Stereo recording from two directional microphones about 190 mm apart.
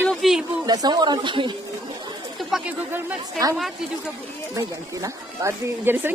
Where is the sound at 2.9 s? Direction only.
20° right (ahead or behind).